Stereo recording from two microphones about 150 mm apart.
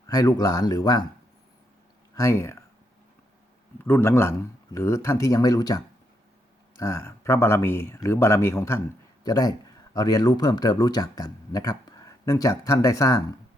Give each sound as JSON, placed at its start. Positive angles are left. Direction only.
{"t": 0.1, "sound": "speech", "side_deg": 25}
{"t": 2.1, "sound": "speech", "side_deg": 20}
{"t": 3.8, "sound": "speech", "side_deg": 15}